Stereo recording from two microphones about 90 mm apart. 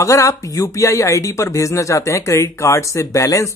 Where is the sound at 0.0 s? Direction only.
35° left (ahead or behind).